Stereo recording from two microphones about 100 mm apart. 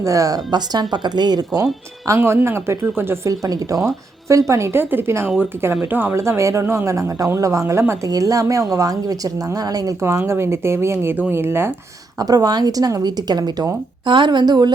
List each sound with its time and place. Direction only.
0.0 s speech: 35° right (ahead or behind)
2.0 s a woman's voice: 25° right (ahead or behind)
3.4 s a woman's voice: 35° right (ahead or behind)
12.2 s speech: 40° right (ahead or behind)
14.0 s speech: 55° right (ahead or behind)